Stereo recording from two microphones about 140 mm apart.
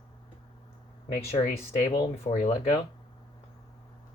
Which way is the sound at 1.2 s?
45° left (ahead or behind).